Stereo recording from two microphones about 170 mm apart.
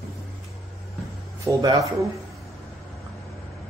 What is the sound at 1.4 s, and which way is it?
Speech, 20° right (ahead or behind).